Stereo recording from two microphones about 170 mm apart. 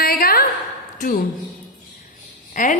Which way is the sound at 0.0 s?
60° left (ahead or behind).